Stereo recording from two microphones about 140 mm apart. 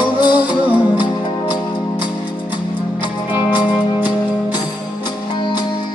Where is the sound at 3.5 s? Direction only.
30° left (ahead or behind).